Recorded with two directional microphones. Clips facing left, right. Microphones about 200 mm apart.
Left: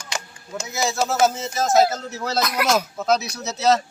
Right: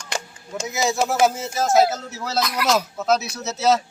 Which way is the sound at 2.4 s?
50° left (ahead or behind).